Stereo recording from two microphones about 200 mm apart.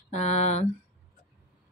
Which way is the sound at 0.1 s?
35° left (ahead or behind).